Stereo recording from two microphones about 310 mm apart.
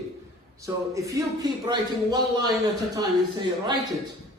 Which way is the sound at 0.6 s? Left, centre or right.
Centre.